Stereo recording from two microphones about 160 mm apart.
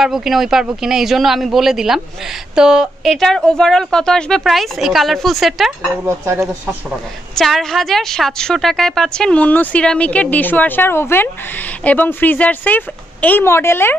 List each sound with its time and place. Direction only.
0.0 s a woman's voice: centre (ahead or behind)
6.0 s speech: 15° right (ahead or behind)
7.3 s a woman's voice: centre (ahead or behind)